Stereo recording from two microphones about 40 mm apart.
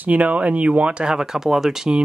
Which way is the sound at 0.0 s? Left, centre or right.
Right.